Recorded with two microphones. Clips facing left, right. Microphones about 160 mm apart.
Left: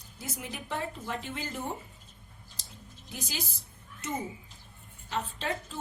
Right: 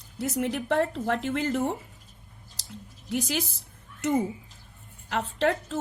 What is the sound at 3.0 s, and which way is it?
Speech, 80° right.